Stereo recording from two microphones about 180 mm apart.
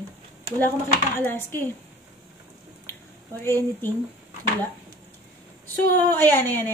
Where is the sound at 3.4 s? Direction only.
15° left (ahead or behind).